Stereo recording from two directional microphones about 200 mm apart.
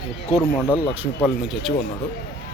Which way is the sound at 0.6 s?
20° left (ahead or behind).